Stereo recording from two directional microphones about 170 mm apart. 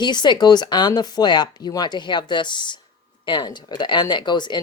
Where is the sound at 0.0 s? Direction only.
25° left (ahead or behind).